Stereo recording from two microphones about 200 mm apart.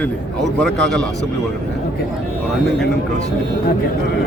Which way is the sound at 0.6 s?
5° left (ahead or behind).